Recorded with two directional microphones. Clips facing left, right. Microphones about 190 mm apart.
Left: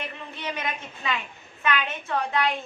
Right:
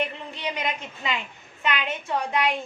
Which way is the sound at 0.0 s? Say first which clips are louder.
Right 5 dB; 15° right (ahead or behind).